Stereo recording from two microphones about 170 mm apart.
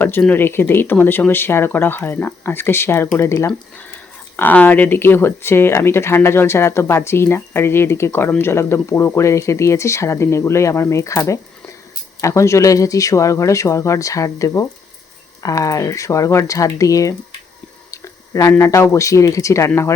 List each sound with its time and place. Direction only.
0.0 s speech: 10° left (ahead or behind)